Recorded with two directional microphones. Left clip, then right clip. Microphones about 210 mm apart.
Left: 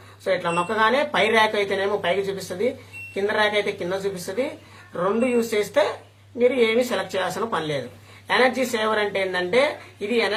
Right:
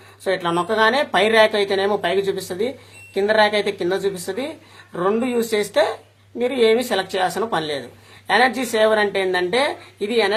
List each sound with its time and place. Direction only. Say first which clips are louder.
0.3 s speech: right 2 dB; 50° right (ahead or behind)